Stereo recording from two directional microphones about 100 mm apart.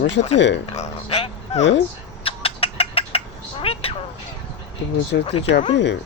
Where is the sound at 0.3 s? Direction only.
90° left.